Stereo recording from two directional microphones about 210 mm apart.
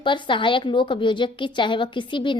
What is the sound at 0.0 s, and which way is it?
A woman's voice, 20° left (ahead or behind).